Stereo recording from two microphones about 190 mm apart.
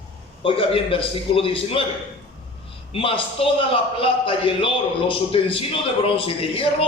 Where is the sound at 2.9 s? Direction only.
30° left (ahead or behind).